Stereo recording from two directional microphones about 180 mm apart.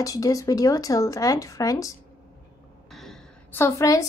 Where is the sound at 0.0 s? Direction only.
20° left (ahead or behind).